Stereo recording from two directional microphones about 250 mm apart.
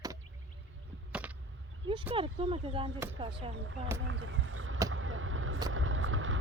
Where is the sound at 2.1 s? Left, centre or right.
Right.